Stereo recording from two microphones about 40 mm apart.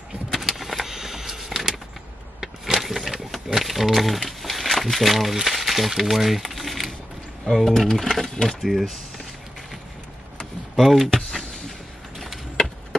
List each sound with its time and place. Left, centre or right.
0.4 s a sound: centre
7.6 s speech: centre
8.5 s speech: centre
10.8 s speech: centre
12.6 s chop: centre